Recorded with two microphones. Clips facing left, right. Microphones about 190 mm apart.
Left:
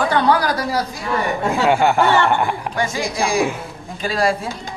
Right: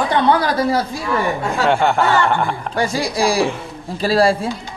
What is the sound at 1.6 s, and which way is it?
Speech, 5° left (ahead or behind).